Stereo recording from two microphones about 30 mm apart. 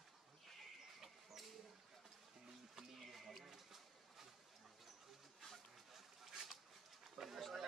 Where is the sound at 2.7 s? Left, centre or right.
Centre.